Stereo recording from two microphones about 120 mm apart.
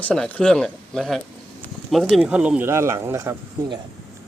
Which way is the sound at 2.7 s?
20° right (ahead or behind).